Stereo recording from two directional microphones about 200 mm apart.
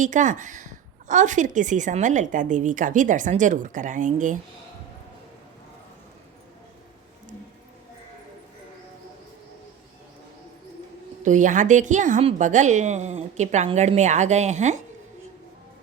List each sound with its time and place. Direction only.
0.0 s a woman's voice: 40° right (ahead or behind)
11.2 s a woman's voice: 40° right (ahead or behind)